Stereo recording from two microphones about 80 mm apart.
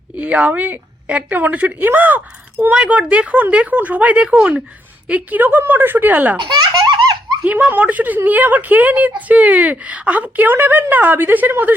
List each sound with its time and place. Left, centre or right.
0.2 s a woman's voice: centre
6.4 s laughter: right
7.4 s a woman's voice: right